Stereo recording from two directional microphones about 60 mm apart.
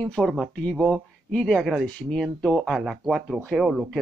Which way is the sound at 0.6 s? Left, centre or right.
Centre.